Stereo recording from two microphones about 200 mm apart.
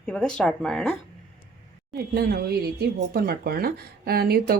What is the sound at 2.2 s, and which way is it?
Speech, 50° right (ahead or behind).